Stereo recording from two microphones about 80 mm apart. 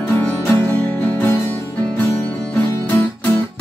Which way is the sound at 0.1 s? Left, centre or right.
Left.